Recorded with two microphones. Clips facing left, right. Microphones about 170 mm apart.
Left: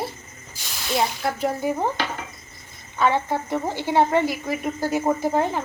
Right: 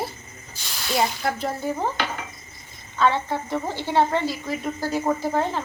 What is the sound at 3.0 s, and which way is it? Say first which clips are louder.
A woman's voice: left 1 dB; 15° left (ahead or behind).